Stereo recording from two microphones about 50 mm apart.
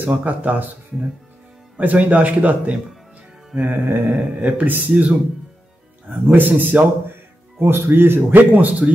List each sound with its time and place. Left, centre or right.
0.0 s speech: right
1.8 s speech: right
6.2 s speech: right
7.6 s speech: right
8.3 s speech: right